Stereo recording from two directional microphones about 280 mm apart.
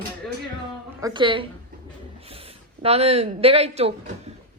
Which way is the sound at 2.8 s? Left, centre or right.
Right.